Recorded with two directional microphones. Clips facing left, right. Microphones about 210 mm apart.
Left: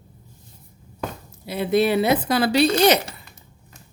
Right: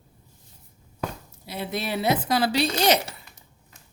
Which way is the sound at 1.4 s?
60° left (ahead or behind).